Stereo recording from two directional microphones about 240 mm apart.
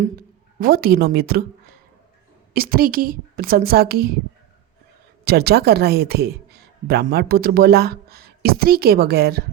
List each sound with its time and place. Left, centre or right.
0.6 s a woman's voice: right
2.5 s a woman's voice: right
5.2 s speech: right